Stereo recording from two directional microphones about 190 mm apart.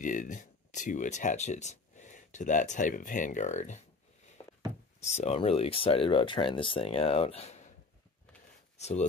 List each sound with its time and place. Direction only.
0.0 s speech: 45° left (ahead or behind)
4.4 s a sound: 20° left (ahead or behind)
5.0 s speech: 35° left (ahead or behind)
8.7 s speech: 35° left (ahead or behind)